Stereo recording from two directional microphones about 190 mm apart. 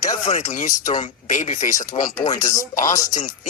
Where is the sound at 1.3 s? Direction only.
40° left (ahead or behind).